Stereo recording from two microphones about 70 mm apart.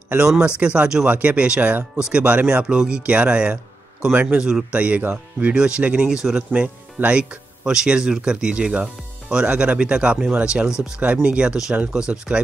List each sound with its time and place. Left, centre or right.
0.6 s speech: centre
4.4 s speech: centre
4.7 s speech: right
6.0 s speech: centre
6.3 s speech: centre